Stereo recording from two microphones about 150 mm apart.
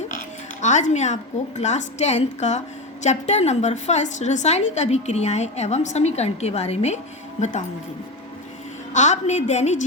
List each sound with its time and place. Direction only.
0.6 s a woman's voice: 55° left (ahead or behind)
8.9 s a woman's voice: 50° left (ahead or behind)